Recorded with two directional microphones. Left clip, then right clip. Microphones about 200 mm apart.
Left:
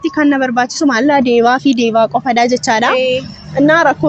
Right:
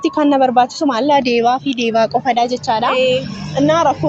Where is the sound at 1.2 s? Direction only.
15° left (ahead or behind).